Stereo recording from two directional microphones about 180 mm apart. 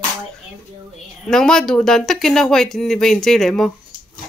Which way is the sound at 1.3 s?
5° left (ahead or behind).